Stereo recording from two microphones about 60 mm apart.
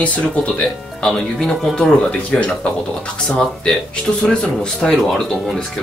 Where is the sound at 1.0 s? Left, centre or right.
Centre.